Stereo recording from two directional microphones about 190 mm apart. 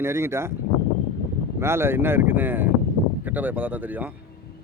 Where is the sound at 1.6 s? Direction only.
15° right (ahead or behind).